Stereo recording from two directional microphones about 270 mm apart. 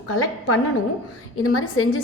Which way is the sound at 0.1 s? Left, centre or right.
Left.